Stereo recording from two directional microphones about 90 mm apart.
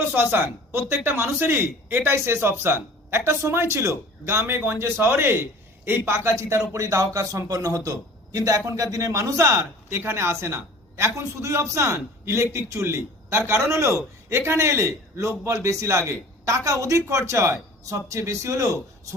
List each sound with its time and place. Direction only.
0.1 s a man's voice: 20° right (ahead or behind); by 18.8 s 35° right (ahead or behind)